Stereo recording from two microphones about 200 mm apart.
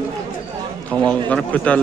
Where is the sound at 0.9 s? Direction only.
5° left (ahead or behind).